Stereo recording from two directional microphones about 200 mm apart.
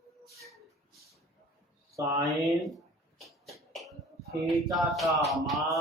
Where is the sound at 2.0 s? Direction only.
15° right (ahead or behind).